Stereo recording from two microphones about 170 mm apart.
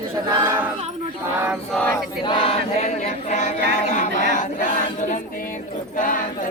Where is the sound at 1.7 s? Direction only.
10° left (ahead or behind).